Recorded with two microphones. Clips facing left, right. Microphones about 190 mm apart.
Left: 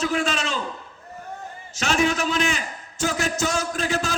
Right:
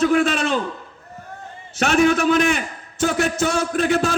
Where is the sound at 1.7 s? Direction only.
55° right (ahead or behind).